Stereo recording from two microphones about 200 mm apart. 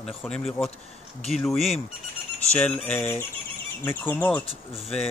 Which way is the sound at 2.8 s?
5° left (ahead or behind).